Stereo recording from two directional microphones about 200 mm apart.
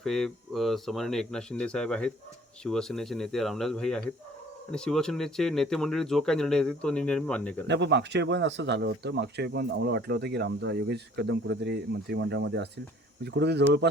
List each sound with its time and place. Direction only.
0.0 s speech: centre (ahead or behind)
7.7 s speech: 60° right (ahead or behind)